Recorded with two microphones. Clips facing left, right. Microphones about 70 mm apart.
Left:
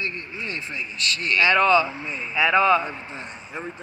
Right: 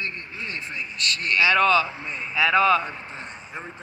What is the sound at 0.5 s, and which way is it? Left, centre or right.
Speech, centre.